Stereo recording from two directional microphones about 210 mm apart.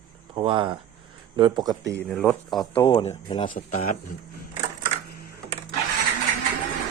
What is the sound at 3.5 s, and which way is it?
Speech, 40° left (ahead or behind).